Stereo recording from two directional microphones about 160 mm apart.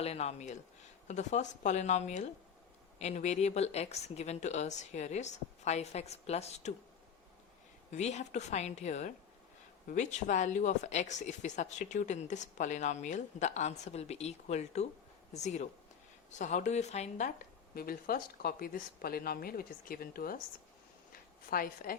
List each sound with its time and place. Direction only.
0.0 s speech: 40° left (ahead or behind)
7.9 s speech: 45° left (ahead or behind)
17.7 s speech: 65° left (ahead or behind)
21.1 s a sound: 65° left (ahead or behind)